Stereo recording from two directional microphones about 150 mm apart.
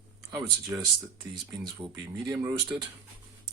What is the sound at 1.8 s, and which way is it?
Speech, 15° right (ahead or behind).